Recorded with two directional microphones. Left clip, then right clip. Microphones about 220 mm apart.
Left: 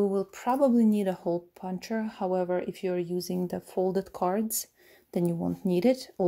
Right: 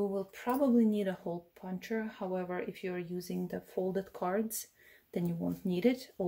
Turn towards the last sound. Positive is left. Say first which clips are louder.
# left 6 dB
turn(degrees=45)  # may be behind; listen again after turning